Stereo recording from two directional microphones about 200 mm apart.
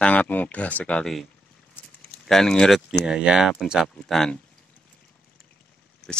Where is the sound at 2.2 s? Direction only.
Centre (ahead or behind).